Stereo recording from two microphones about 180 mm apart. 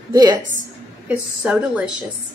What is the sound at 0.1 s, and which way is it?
Speech, 20° right (ahead or behind).